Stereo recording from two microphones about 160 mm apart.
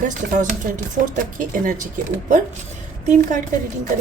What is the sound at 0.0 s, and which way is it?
A woman's voice, 50° right (ahead or behind).